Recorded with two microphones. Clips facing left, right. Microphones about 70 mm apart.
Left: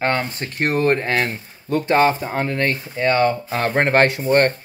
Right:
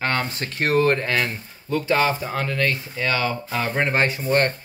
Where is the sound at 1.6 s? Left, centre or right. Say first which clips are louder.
Left 4 dB; left.